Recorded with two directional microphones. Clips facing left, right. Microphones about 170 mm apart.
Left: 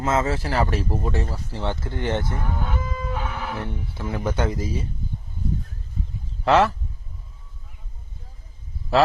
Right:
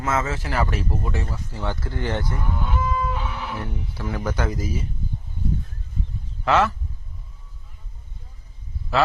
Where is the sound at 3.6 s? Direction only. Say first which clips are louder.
Even; 25° left (ahead or behind).